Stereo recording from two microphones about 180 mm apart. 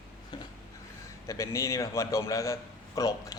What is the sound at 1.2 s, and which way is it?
A man's voice, 15° left (ahead or behind).